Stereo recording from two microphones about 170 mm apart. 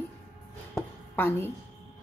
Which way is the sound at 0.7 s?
15° left (ahead or behind).